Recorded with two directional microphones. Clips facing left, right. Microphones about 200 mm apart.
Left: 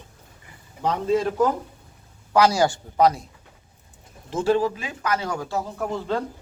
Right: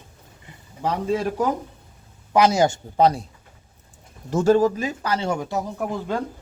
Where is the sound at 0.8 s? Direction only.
10° right (ahead or behind).